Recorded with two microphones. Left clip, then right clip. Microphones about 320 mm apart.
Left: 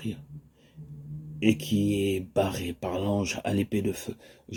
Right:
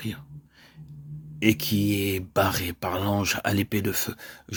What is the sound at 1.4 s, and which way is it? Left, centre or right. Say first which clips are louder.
Speech: right 2 dB; right.